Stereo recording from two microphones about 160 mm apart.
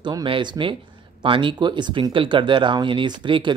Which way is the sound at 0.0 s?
30° right (ahead or behind).